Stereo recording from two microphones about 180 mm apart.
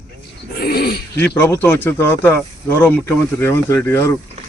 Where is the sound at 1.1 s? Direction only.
10° left (ahead or behind).